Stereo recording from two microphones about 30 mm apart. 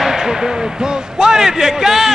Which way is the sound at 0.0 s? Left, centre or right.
Centre.